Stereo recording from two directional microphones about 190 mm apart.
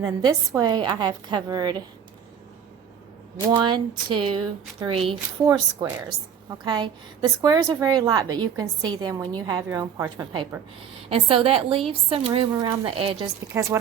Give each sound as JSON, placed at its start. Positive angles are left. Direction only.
{"t": 0.0, "sound": "a woman's voice", "side_deg": -20}
{"t": 3.6, "sound": "a woman's voice", "side_deg": -25}
{"t": 13.5, "sound": "speech", "side_deg": -15}